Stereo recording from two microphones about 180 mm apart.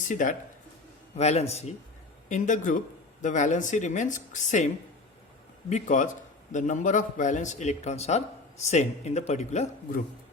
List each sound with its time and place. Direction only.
0.1 s a man's voice: 45° left (ahead or behind)